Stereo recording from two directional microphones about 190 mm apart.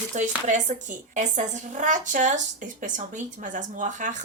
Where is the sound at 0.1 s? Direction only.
40° right (ahead or behind).